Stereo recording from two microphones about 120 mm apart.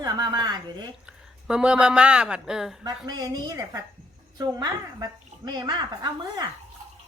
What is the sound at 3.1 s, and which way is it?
Speech, 35° right (ahead or behind).